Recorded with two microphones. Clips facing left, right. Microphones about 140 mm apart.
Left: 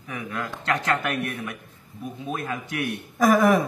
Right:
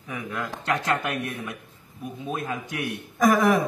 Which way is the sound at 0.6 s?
15° right (ahead or behind).